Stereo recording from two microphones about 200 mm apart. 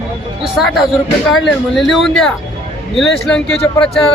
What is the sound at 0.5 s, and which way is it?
Speech, centre (ahead or behind).